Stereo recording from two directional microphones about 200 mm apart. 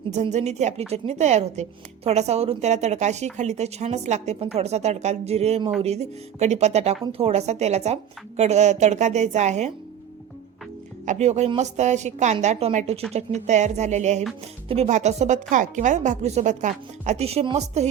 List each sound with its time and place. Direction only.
0.1 s a woman's voice: 35° right (ahead or behind)
11.0 s a woman's voice: 35° right (ahead or behind)